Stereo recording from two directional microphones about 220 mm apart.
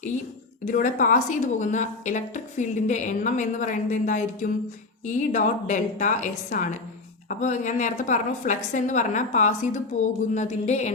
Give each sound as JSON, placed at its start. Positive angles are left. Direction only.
{"t": 0.6, "sound": "a woman's voice", "side_deg": 35}